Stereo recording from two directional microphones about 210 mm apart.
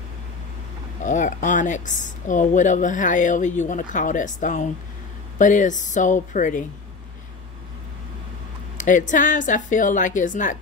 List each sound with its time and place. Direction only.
1.0 s speech: 35° left (ahead or behind)
8.7 s speech: 35° left (ahead or behind)